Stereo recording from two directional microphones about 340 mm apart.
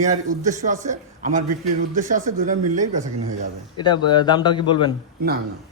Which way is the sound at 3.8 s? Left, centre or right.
Centre.